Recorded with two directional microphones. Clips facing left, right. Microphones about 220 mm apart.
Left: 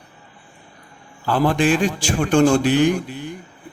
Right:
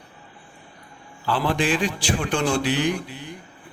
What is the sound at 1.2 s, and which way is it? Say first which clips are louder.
Speech: left 5 dB; 45° left (ahead or behind).